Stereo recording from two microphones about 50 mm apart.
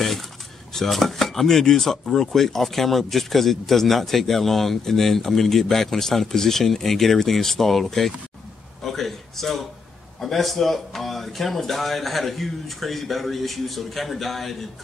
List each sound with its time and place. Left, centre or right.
0.7 s speech: centre
8.8 s a sound: centre
10.2 s speech: centre